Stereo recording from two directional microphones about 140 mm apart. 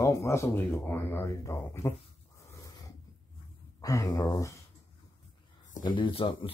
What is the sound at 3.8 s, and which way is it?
Speech, 25° left (ahead or behind).